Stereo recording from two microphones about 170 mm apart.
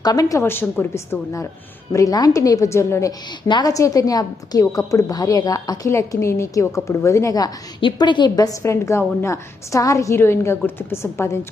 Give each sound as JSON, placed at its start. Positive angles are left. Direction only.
{"t": 0.0, "sound": "a woman's voice", "side_deg": 20}